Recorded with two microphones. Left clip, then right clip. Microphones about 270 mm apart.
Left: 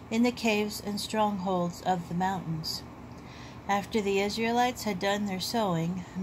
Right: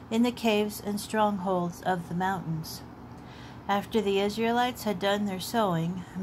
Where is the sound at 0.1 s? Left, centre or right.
Right.